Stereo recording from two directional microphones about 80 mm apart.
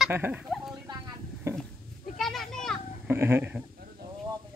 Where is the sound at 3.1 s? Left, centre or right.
Right.